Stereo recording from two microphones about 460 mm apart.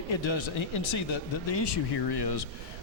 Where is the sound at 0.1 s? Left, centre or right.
Left.